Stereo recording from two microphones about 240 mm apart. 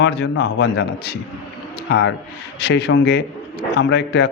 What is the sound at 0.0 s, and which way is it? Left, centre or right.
Speech, left.